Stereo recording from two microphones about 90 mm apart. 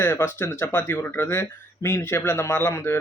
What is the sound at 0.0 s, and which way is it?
Speech, 25° left (ahead or behind).